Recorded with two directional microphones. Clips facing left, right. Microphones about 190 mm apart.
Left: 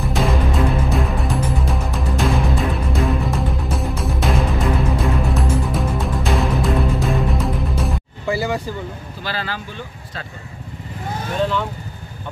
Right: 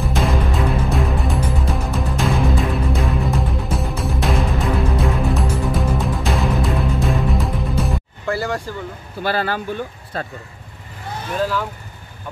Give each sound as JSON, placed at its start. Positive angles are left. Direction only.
{"t": 0.0, "sound": "music", "side_deg": 0}
{"t": 9.2, "sound": "speech", "side_deg": -55}
{"t": 11.3, "sound": "speech", "side_deg": -5}